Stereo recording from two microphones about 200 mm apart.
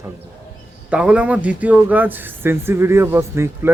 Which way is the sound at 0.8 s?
5° right (ahead or behind).